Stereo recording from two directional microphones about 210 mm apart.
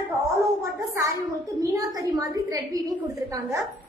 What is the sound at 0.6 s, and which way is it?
A woman's voice, 15° right (ahead or behind).